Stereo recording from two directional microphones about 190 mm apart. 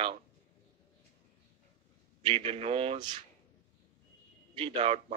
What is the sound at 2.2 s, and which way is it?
Speech, 30° right (ahead or behind).